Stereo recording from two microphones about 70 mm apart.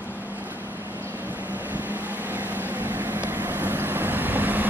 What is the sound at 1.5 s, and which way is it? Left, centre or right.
Vehicle, right.